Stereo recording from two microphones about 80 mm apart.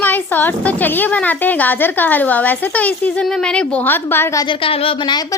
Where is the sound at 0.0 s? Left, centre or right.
Left.